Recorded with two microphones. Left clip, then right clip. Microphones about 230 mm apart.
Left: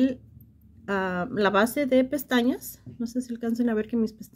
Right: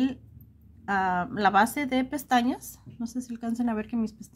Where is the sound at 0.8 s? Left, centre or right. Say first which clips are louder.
Right 2 dB; centre.